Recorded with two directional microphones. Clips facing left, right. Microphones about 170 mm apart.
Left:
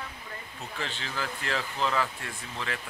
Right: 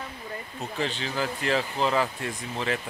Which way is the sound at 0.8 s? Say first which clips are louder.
Right 6 dB; 20° right (ahead or behind).